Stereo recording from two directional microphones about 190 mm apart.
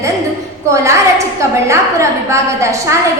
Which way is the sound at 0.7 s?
15° right (ahead or behind).